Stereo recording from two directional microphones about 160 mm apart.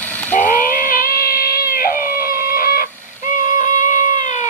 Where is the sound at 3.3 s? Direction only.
55° left (ahead or behind).